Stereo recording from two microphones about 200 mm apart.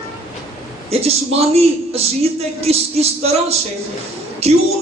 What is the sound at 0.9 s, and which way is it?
Music, 30° right (ahead or behind).